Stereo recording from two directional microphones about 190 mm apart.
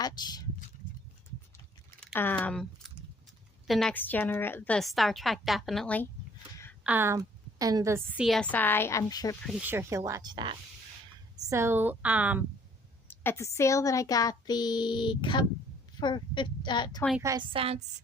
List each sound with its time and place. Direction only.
0.0 s speech: 20° left (ahead or behind)
2.1 s a woman's voice: 10° left (ahead or behind)
6.8 s a woman's voice: 10° right (ahead or behind)
8.2 s a woman's voice: centre (ahead or behind); by 9.3 s 20° left (ahead or behind)
9.5 s speech: 10° right (ahead or behind)
13.1 s speech: 15° left (ahead or behind)
17.2 s a woman's voice: 20° right (ahead or behind)